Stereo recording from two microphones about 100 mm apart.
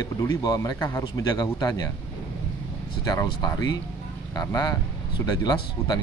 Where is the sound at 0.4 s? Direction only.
40° left (ahead or behind).